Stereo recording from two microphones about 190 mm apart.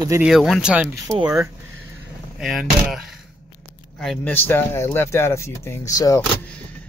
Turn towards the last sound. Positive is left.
turn(degrees=15)  # may be behind; listen again after turning